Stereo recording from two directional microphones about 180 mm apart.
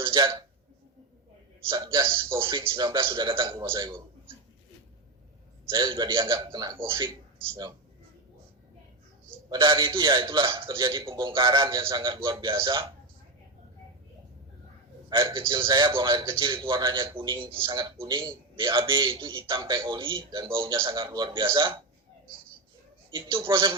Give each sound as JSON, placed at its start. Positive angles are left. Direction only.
{"t": 0.0, "sound": "a man's voice", "side_deg": -25}
{"t": 1.7, "sound": "a man's voice", "side_deg": -25}
{"t": 5.6, "sound": "a man's voice", "side_deg": -25}
{"t": 9.5, "sound": "a man's voice", "side_deg": -25}
{"t": 15.1, "sound": "a man's voice", "side_deg": -25}
{"t": 23.1, "sound": "a man's voice", "side_deg": -25}